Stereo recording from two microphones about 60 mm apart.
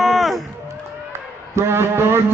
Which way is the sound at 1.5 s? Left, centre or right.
Right.